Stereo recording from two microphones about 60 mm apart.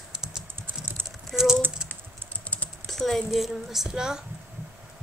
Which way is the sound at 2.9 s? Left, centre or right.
Centre.